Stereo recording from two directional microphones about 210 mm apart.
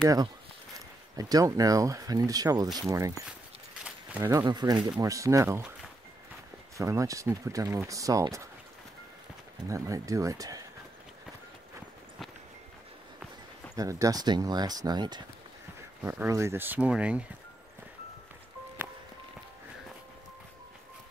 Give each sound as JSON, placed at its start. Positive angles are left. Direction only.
{"t": 1.1, "sound": "speech", "side_deg": -15}
{"t": 6.8, "sound": "speech", "side_deg": -15}
{"t": 9.7, "sound": "speech", "side_deg": -15}
{"t": 13.7, "sound": "speech", "side_deg": -15}
{"t": 16.0, "sound": "speech", "side_deg": -10}